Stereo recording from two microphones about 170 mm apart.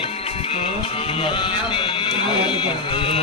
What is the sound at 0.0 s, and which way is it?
Speech, 35° left (ahead or behind).